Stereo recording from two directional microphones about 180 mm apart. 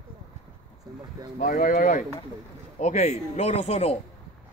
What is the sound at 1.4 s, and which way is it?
Speech, 45° left (ahead or behind).